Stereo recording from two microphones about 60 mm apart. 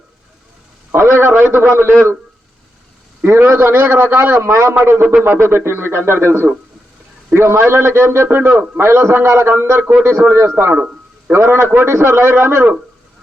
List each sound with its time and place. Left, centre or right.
0.9 s a man's voice: right
3.2 s speech: right
4.4 s a man's voice: right
5.2 s a man's voice: right
10.8 s a sound: right
11.3 s a man's voice: right